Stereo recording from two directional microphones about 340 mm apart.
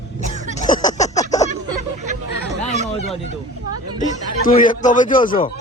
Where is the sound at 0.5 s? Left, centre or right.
Left.